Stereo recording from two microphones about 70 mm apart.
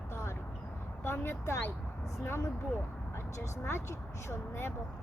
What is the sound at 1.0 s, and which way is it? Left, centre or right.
Speech, left.